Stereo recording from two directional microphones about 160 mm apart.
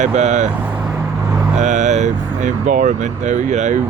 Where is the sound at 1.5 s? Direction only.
50° right (ahead or behind).